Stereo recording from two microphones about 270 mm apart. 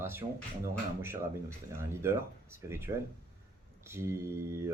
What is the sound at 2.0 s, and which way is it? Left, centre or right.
Speech, centre.